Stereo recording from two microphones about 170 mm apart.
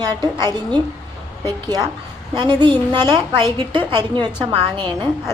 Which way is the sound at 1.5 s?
25° right (ahead or behind).